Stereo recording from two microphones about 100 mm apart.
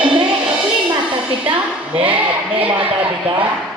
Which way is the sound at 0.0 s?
55° right (ahead or behind).